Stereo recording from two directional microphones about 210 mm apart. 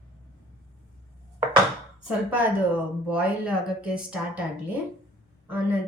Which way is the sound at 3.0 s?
5° right (ahead or behind).